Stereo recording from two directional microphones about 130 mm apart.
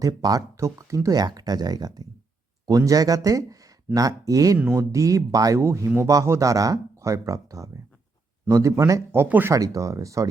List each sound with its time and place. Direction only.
0.0 s speech: 30° right (ahead or behind)
4.5 s speech: 15° right (ahead or behind)
9.6 s speech: 25° right (ahead or behind)